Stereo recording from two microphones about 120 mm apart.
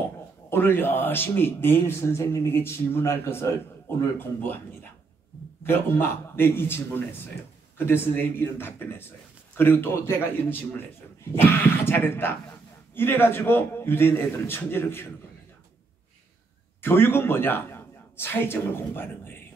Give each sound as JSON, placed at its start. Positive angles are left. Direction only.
{"t": 0.5, "sound": "a man's voice", "side_deg": 20}
{"t": 5.6, "sound": "a man's voice", "side_deg": 20}
{"t": 16.8, "sound": "a man's voice", "side_deg": 20}